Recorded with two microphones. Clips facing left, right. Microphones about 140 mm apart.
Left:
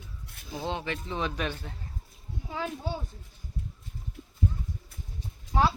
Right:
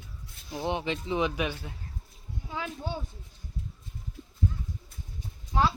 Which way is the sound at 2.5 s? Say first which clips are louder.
Left 2 dB; 5° left (ahead or behind).